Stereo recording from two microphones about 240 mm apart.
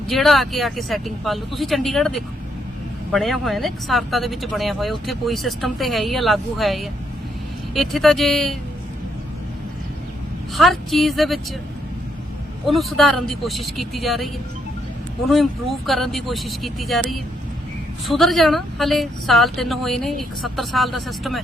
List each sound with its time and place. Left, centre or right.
0.1 s speech: centre
10.5 s speech: centre
12.6 s speech: centre
15.3 s speech: centre